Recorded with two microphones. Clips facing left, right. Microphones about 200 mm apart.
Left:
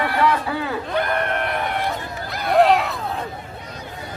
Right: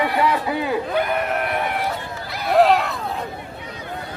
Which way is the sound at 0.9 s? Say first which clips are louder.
Right 1 dB; 5° right (ahead or behind).